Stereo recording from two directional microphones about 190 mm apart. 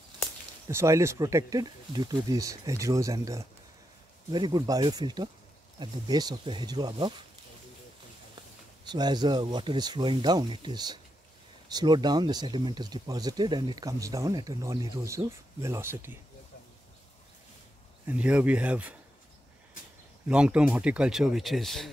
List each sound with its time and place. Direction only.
0.7 s speech: 15° right (ahead or behind)
8.8 s speech: 20° right (ahead or behind)
18.0 s speech: 5° right (ahead or behind)
20.2 s speech: 5° right (ahead or behind)